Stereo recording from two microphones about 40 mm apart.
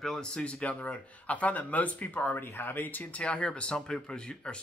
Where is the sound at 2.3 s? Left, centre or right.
Left.